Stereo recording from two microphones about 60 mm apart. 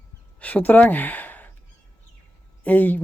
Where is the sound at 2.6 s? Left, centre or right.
Left.